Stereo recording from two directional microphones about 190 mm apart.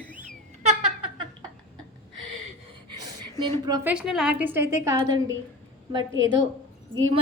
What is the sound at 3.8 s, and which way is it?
A woman's voice, 5° right (ahead or behind).